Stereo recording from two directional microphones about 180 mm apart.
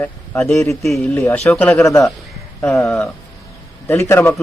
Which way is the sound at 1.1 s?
15° left (ahead or behind).